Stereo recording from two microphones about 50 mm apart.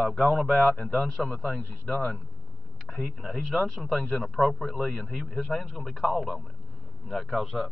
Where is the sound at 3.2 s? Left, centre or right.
Centre.